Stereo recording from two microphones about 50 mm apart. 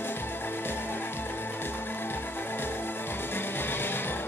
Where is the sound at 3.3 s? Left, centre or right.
Left.